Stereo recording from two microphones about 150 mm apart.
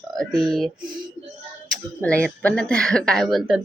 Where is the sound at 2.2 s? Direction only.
5° left (ahead or behind).